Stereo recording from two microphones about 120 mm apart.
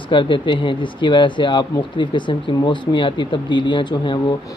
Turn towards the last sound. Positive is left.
turn(degrees=40)  # may be behind; listen again after turning